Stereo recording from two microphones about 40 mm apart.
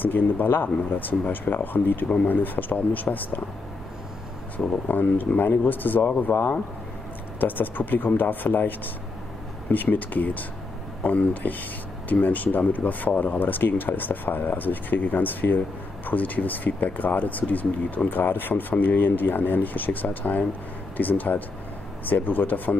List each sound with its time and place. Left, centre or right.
0.0 s speech: left
4.8 s speech: left
7.3 s speech: left